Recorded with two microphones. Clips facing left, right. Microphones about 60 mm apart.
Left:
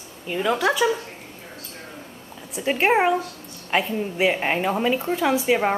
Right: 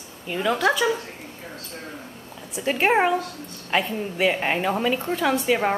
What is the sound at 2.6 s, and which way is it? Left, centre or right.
A woman's voice, centre.